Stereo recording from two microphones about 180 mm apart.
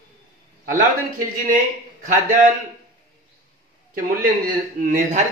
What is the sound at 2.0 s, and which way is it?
Speech, 45° right (ahead or behind).